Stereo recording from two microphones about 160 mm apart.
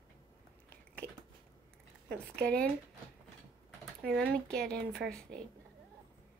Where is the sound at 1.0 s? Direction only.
20° right (ahead or behind).